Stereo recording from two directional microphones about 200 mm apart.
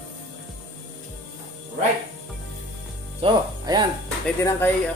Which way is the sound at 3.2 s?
20° right (ahead or behind).